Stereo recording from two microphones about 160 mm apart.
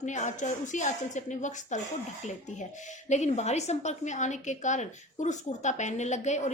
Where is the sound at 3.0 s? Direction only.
45° left (ahead or behind).